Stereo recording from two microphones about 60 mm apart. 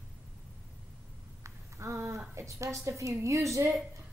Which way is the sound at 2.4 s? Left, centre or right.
Right.